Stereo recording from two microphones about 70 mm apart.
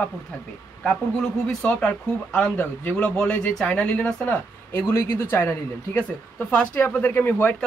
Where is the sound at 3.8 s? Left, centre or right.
Centre.